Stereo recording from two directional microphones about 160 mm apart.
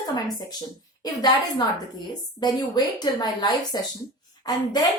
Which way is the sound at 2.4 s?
25° left (ahead or behind).